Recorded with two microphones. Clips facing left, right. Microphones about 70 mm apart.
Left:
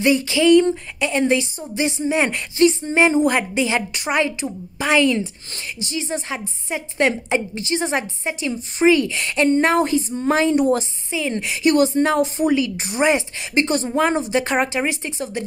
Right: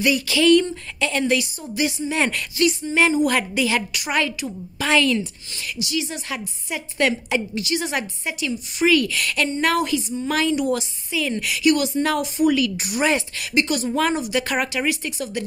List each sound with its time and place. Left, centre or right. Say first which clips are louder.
0.0 s a woman's voice: left 2 dB; left
5.8 s a woman's voice: left 1 dB; left